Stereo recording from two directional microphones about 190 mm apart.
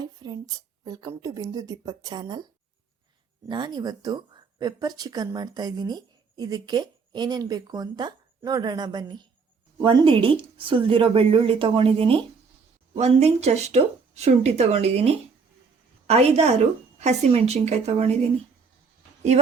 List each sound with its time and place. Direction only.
0.0 s speech: 20° right (ahead or behind)
3.5 s speech: 25° right (ahead or behind)
19.3 s speech: 35° right (ahead or behind)